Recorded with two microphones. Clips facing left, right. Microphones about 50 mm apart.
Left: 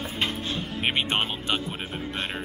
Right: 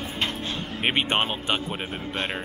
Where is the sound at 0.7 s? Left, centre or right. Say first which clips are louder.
Right 2 dB; centre.